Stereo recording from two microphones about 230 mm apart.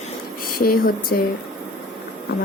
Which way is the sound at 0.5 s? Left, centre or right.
Left.